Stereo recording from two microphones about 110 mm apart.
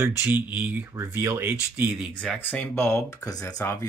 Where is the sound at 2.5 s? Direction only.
15° left (ahead or behind).